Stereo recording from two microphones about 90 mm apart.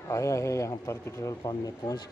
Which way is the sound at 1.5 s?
50° left (ahead or behind).